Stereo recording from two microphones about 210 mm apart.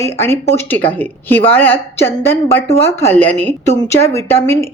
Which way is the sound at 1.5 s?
10° left (ahead or behind).